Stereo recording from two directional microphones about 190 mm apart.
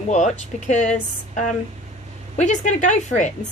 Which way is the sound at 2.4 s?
40° left (ahead or behind).